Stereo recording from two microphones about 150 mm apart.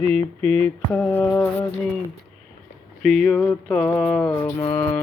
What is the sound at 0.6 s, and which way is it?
Mantra, 10° left (ahead or behind).